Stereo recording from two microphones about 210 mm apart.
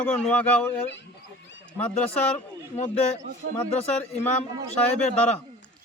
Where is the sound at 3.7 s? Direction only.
30° left (ahead or behind).